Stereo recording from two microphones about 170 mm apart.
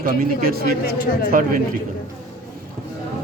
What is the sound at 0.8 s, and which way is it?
Speech, 55° left (ahead or behind).